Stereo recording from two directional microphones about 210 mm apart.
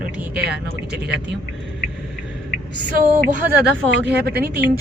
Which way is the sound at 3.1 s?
40° right (ahead or behind).